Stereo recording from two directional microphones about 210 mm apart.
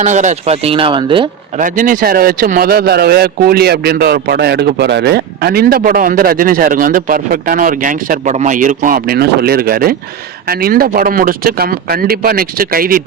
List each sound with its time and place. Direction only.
0.0 s speech: 35° right (ahead or behind)
1.5 s speech: 40° right (ahead or behind)